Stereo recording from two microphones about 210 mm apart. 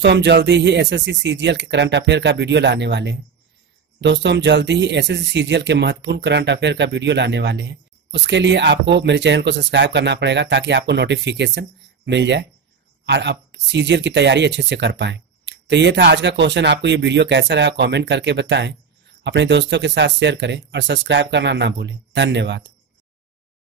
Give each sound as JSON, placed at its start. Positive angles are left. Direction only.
{"t": 0.0, "sound": "speech", "side_deg": -55}